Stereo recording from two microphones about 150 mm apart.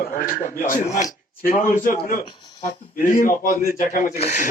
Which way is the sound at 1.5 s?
65° left (ahead or behind).